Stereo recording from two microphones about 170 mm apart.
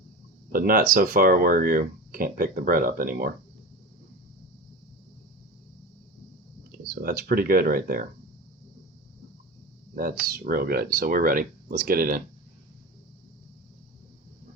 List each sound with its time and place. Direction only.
0.5 s speech: 55° right (ahead or behind)
6.7 s speech: 60° right (ahead or behind)
9.9 s speech: 60° right (ahead or behind)